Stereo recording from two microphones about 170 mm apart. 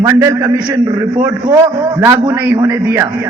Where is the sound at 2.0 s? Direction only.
20° right (ahead or behind).